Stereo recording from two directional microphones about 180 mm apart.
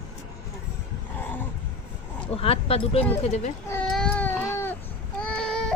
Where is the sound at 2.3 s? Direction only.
35° left (ahead or behind).